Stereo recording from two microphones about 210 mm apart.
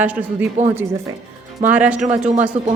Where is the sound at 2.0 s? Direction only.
35° right (ahead or behind).